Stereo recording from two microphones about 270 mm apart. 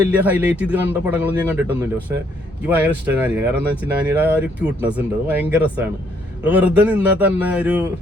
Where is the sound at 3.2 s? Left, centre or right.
Centre.